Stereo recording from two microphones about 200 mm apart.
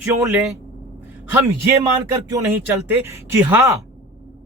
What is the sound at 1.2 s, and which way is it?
Speech, 10° right (ahead or behind).